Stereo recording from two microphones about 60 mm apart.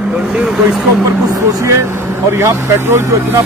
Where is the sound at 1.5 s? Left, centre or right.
Right.